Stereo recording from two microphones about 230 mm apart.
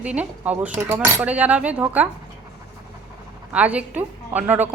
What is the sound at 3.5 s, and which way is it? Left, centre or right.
A woman's voice, centre.